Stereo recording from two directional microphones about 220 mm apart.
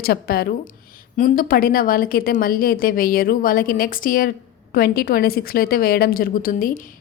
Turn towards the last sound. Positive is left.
turn(degrees=40)  # may be behind; listen again after turning